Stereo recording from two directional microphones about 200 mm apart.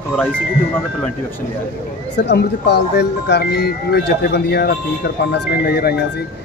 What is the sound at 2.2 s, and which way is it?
Speech, 55° left (ahead or behind).